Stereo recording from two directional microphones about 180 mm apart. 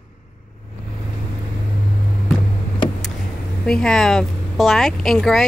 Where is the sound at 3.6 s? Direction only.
5° left (ahead or behind).